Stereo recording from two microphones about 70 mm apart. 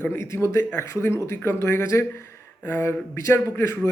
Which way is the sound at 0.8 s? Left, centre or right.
Left.